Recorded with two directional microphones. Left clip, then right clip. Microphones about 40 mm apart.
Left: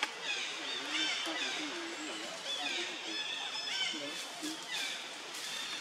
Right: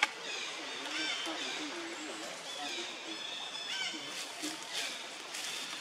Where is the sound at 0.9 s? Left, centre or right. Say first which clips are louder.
Left 1 dB; centre.